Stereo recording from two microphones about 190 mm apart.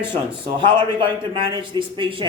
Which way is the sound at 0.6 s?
25° right (ahead or behind).